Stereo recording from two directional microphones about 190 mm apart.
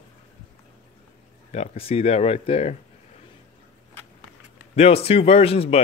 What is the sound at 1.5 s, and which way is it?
Speech, 35° left (ahead or behind).